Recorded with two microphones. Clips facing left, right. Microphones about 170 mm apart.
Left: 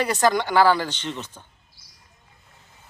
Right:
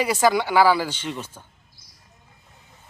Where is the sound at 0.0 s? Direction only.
10° right (ahead or behind).